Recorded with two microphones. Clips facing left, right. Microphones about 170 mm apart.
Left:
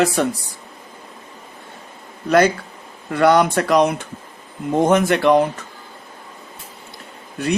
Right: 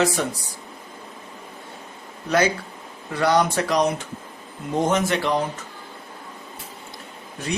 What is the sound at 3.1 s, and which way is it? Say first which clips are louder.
Speech: left 5 dB; 60° left (ahead or behind).